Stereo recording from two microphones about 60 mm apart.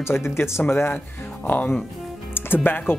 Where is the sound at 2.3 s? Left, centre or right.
Left.